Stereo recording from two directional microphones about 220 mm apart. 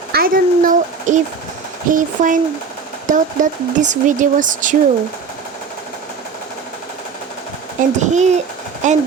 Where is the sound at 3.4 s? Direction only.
35° right (ahead or behind).